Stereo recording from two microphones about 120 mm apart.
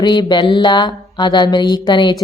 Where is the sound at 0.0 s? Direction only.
40° left (ahead or behind).